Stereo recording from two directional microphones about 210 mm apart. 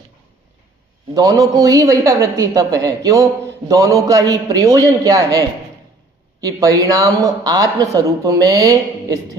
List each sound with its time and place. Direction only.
1.1 s speech: 15° right (ahead or behind)